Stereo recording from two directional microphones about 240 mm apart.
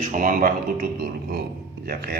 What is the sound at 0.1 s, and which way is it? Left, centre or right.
A man's voice, right.